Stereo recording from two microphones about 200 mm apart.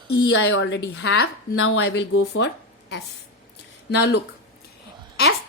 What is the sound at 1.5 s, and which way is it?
Speech, 90° left.